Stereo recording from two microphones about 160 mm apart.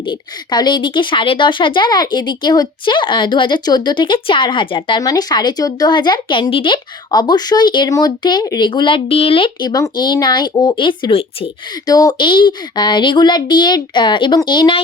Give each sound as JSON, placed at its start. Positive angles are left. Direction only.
{"t": 0.0, "sound": "speech", "side_deg": 30}
{"t": 11.9, "sound": "speech", "side_deg": 25}